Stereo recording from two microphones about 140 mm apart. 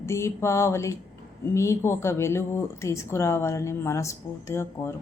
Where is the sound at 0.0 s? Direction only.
20° left (ahead or behind).